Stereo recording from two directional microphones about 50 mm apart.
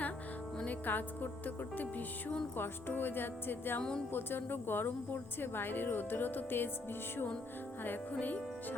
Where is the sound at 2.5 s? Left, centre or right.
Left.